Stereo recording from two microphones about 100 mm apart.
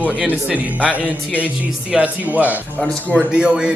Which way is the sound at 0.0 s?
15° right (ahead or behind).